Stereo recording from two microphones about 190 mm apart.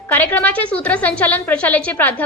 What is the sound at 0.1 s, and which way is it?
A woman's voice, 10° left (ahead or behind).